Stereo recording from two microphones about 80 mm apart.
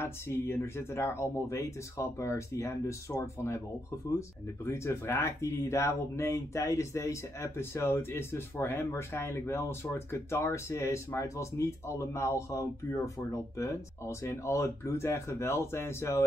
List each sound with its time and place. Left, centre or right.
0.0 s speech: left
4.6 s speech: left